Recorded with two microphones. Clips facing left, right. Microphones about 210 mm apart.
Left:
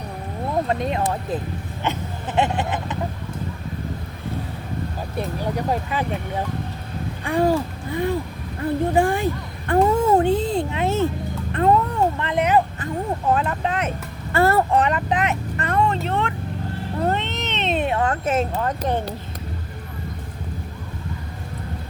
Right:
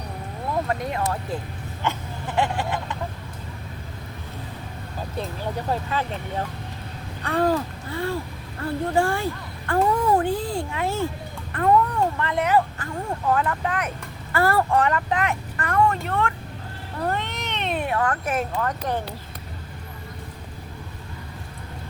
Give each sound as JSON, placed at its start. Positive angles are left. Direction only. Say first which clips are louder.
{"t": 0.7, "sound": "speech", "louder": "left 4 dB", "side_deg": 20}
{"t": 1.8, "sound": "hiccup", "louder": "left 1 dB", "side_deg": 20}
{"t": 5.1, "sound": "speech", "louder": "left 4 dB", "side_deg": 15}
{"t": 7.3, "sound": "speech", "louder": "left 2 dB", "side_deg": 10}
{"t": 11.5, "sound": "a sound", "louder": "left 1 dB", "side_deg": 25}
{"t": 14.3, "sound": "speech", "louder": "left 3 dB", "side_deg": 25}
{"t": 17.0, "sound": "cat", "louder": "left 3 dB", "side_deg": 25}